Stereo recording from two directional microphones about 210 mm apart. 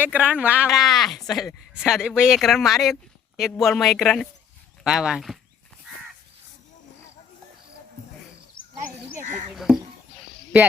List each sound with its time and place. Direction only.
0.0 s speech: 5° right (ahead or behind)
9.1 s speech: 35° right (ahead or behind)
9.6 s a sound: centre (ahead or behind)